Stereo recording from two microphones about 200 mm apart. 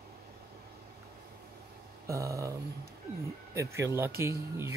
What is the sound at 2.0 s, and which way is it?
Speech, 15° right (ahead or behind).